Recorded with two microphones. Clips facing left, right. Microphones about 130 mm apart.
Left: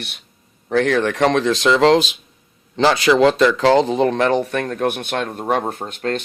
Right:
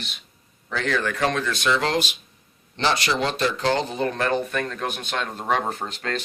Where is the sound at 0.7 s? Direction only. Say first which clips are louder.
Left 8 dB; 60° left (ahead or behind); by 2.0 s 90° left.